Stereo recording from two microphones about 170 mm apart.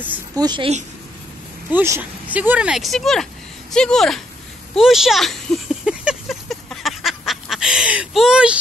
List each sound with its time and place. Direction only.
0.4 s a woman's voice: 25° right (ahead or behind)
1.7 s speech: 10° right (ahead or behind)
4.7 s a sound: centre (ahead or behind)